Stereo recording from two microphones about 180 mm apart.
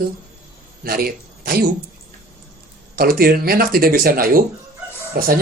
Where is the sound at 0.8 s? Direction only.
55° right (ahead or behind).